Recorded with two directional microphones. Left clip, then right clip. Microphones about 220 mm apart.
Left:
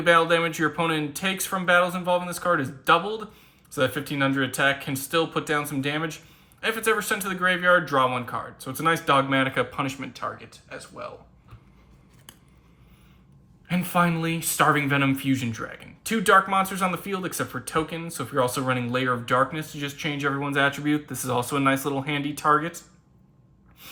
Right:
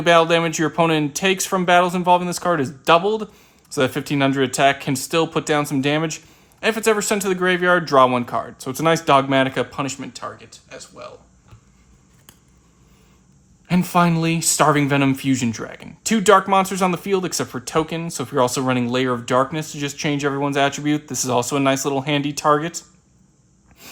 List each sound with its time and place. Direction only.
0.0 s a man's voice: 20° right (ahead or behind); by 11.1 s centre (ahead or behind)
13.7 s speech: 15° right (ahead or behind)